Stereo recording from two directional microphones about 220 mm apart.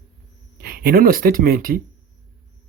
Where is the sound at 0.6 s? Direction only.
45° right (ahead or behind).